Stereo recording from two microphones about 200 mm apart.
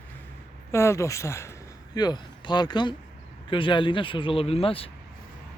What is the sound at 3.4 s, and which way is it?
Speech, 25° left (ahead or behind).